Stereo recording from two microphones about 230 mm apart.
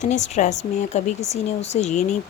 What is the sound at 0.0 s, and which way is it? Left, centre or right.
Speech, left.